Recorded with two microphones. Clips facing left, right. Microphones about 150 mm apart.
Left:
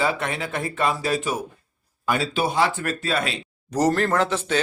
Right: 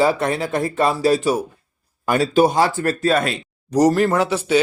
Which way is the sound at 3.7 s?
15° right (ahead or behind).